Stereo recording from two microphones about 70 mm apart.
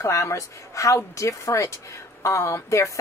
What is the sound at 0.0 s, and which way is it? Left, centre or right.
Speech, left.